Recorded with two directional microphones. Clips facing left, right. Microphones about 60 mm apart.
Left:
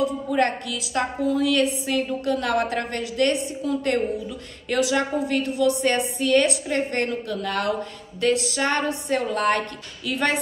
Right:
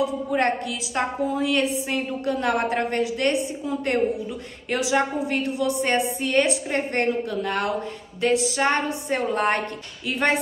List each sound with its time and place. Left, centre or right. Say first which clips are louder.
0.3 s a woman's voice: even; right